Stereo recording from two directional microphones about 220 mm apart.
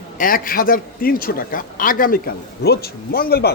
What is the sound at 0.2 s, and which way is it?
A man's voice, 40° left (ahead or behind).